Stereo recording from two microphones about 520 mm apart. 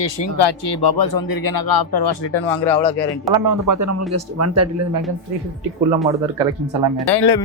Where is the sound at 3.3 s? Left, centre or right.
Right.